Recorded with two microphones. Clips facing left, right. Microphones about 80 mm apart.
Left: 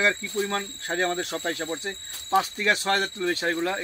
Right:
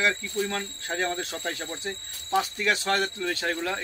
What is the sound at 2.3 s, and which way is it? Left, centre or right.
Speech, left.